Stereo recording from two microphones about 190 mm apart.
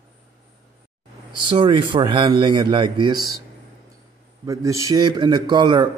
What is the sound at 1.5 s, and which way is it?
A man's voice, 25° right (ahead or behind).